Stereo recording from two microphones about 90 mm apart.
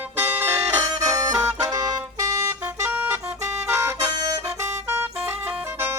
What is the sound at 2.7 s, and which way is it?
Music, 15° right (ahead or behind).